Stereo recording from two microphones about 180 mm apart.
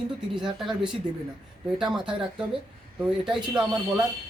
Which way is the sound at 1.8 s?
5° right (ahead or behind).